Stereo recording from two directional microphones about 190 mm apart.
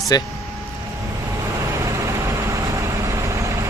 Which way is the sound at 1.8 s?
15° right (ahead or behind).